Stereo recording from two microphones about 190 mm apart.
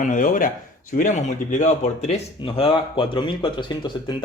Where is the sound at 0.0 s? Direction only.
45° left (ahead or behind).